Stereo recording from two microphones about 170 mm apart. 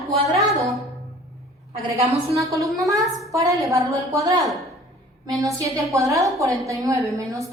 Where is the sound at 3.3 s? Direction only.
20° right (ahead or behind).